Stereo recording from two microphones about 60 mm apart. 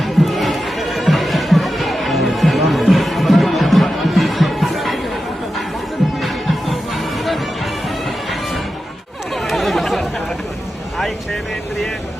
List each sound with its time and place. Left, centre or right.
0.0 s music: centre
6.2 s music: centre
9.3 s chatter: centre